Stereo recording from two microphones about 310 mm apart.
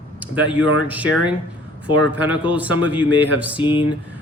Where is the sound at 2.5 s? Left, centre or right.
Centre.